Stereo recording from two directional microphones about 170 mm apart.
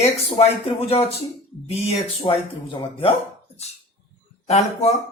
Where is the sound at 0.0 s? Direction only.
35° left (ahead or behind).